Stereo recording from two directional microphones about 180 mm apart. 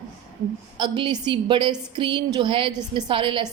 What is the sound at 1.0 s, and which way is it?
A woman's voice, 25° right (ahead or behind).